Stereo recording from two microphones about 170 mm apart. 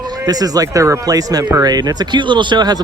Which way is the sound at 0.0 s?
25° right (ahead or behind).